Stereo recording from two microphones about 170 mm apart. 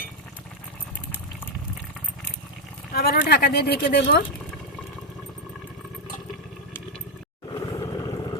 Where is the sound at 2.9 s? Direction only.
65° left (ahead or behind).